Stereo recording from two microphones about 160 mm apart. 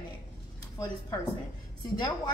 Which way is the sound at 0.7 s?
25° left (ahead or behind).